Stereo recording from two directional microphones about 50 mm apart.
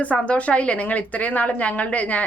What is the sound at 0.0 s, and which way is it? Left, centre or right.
A woman's voice, left.